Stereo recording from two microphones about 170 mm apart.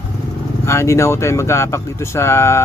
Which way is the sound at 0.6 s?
15° left (ahead or behind).